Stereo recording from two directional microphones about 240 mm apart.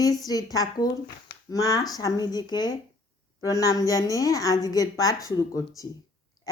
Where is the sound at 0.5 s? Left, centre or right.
Centre.